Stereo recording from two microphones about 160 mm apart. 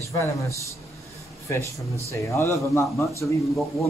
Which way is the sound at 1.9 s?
20° left (ahead or behind).